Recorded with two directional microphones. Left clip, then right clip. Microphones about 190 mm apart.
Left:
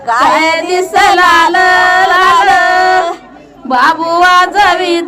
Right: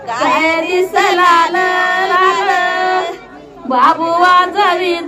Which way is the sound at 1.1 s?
40° left (ahead or behind).